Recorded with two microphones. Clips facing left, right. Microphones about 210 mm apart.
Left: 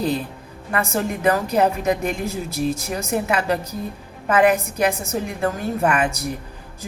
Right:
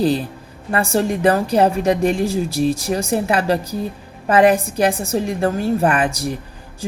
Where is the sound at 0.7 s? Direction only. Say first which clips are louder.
Right 5 dB; 30° right (ahead or behind).